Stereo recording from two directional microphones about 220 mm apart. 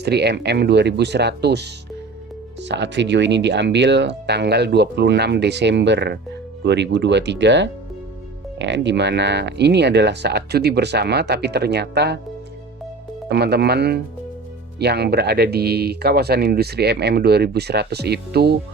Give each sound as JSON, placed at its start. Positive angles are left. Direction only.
{"t": 0.0, "sound": "speech", "side_deg": -50}
{"t": 13.2, "sound": "speech", "side_deg": -45}